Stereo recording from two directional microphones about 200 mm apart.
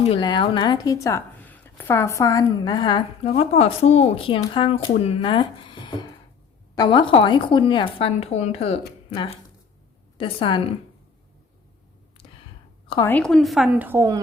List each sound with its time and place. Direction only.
0.0 s a woman's voice: 25° left (ahead or behind)
13.1 s a woman's voice: 5° left (ahead or behind); by 14.2 s 15° right (ahead or behind)